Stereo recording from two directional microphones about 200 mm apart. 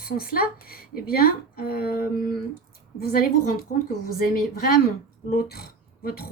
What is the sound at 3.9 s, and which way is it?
Speech, 50° left (ahead or behind).